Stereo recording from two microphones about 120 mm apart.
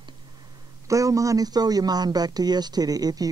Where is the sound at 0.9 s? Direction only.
25° right (ahead or behind).